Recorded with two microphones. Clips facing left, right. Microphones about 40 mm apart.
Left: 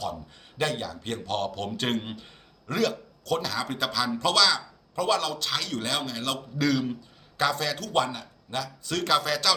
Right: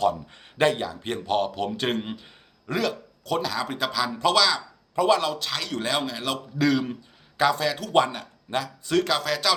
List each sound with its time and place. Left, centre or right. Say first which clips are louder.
0.6 s a man's voice: right 6 dB; right
5.5 s a man's voice: right 2 dB; centre
7.9 s speech: right 5 dB; right
9.0 s speech: left 1 dB; centre